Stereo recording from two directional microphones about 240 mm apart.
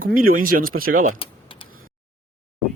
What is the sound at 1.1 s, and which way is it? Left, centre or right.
Typing, left.